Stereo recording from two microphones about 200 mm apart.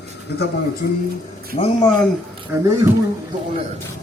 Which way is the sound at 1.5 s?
30° left (ahead or behind).